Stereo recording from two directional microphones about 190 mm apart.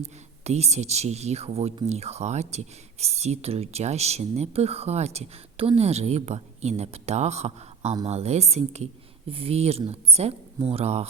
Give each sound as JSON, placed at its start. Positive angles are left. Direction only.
{"t": 0.0, "sound": "speech", "side_deg": -35}